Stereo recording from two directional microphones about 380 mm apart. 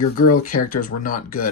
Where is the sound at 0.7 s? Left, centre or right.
Left.